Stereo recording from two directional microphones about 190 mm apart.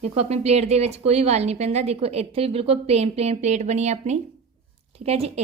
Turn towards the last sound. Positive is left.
turn(degrees=-30)  # may be behind; listen again after turning